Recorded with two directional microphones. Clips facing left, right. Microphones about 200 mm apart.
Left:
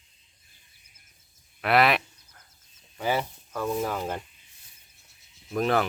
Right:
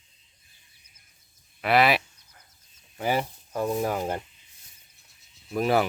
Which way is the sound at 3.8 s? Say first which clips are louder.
Right 2 dB; 15° right (ahead or behind).